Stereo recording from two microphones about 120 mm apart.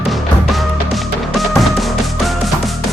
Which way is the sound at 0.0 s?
Centre (ahead or behind).